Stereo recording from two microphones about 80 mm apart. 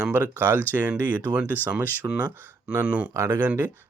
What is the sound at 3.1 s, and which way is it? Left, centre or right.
Speech, right.